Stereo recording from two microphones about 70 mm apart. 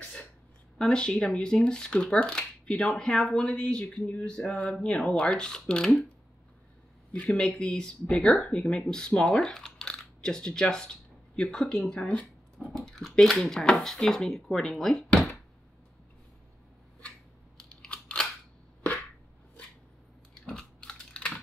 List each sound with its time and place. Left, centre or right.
0.0 s a sound: centre
0.7 s speech: centre
7.2 s speech: centre
12.7 s speech: centre
17.8 s scissors: centre
20.4 s typing: centre